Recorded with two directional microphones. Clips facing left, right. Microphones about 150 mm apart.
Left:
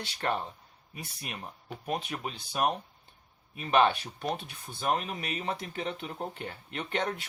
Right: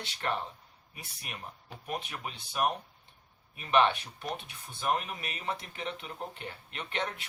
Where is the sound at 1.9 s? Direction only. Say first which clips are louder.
Left 4 dB; 35° left (ahead or behind).